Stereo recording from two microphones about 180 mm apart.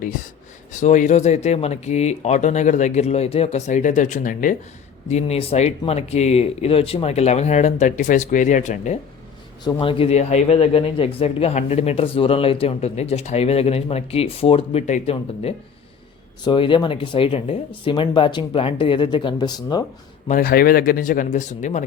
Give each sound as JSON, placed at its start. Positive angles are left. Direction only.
{"t": 0.7, "sound": "speech", "side_deg": 40}
{"t": 5.0, "sound": "speech", "side_deg": 35}
{"t": 9.6, "sound": "speech", "side_deg": 30}
{"t": 20.2, "sound": "speech", "side_deg": 50}